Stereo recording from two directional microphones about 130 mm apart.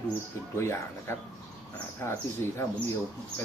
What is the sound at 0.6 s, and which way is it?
Speech, 20° left (ahead or behind).